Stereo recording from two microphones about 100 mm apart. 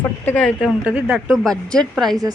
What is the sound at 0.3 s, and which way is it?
Speech, 10° left (ahead or behind).